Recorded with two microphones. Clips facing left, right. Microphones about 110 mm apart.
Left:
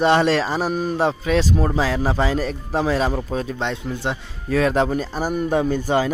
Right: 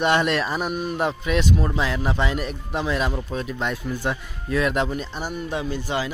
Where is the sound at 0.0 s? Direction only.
30° left (ahead or behind).